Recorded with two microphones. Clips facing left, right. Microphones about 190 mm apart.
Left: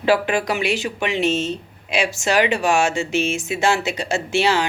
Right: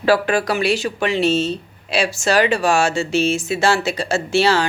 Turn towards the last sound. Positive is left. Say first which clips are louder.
# right 2 dB
turn(degrees=15)  # may be behind; listen again after turning